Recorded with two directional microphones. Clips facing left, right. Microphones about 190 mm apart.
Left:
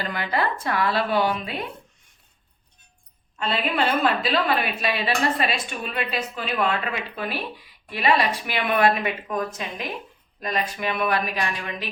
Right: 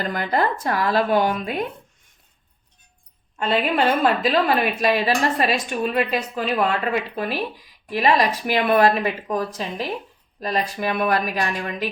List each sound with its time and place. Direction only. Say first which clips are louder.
0.0 s a woman's voice: right 4 dB; 45° right (ahead or behind)
3.3 s a woman's voice: right 4 dB; 45° right (ahead or behind)